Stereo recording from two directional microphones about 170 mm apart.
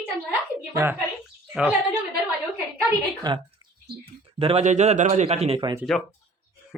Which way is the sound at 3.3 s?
25° right (ahead or behind).